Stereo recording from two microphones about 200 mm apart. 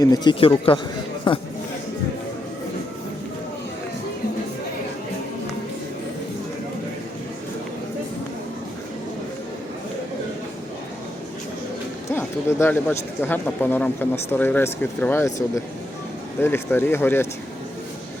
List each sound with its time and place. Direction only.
0.0 s speech: 20° left (ahead or behind)
12.0 s speech: 15° left (ahead or behind)